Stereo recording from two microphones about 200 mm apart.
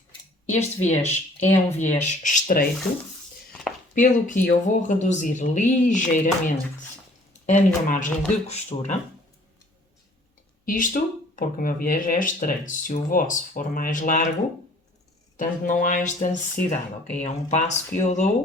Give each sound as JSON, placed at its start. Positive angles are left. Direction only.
{"t": 0.5, "sound": "speech", "side_deg": 35}
{"t": 3.9, "sound": "speech", "side_deg": 40}
{"t": 10.7, "sound": "speech", "side_deg": 45}
{"t": 15.4, "sound": "speech", "side_deg": 40}